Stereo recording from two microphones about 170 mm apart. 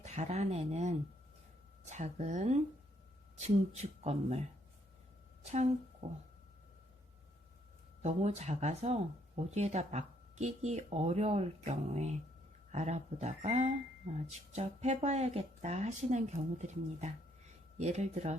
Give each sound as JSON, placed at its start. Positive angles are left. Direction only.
{"t": 0.0, "sound": "speech", "side_deg": -45}
{"t": 4.0, "sound": "speech", "side_deg": -40}
{"t": 5.5, "sound": "a woman's voice", "side_deg": -40}
{"t": 8.0, "sound": "speech", "side_deg": -40}